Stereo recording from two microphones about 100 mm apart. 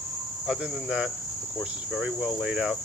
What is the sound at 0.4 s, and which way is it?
Cricket, 5° right (ahead or behind).